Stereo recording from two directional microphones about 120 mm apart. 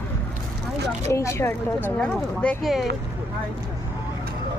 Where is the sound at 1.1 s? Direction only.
25° left (ahead or behind); by 2.7 s 10° left (ahead or behind).